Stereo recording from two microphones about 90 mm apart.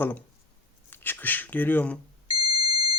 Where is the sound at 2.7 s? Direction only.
55° right (ahead or behind).